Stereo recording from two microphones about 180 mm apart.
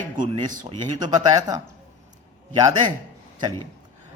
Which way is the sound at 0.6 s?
25° right (ahead or behind).